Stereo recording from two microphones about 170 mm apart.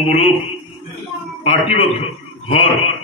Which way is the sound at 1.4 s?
35° left (ahead or behind).